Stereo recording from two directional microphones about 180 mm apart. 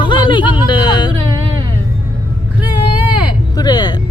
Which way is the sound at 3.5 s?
25° left (ahead or behind).